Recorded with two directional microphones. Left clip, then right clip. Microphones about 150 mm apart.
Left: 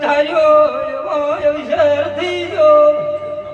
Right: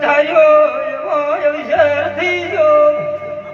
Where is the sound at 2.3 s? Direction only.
15° left (ahead or behind).